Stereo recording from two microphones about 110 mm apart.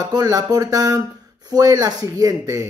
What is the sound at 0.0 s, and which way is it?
Speech, 35° right (ahead or behind).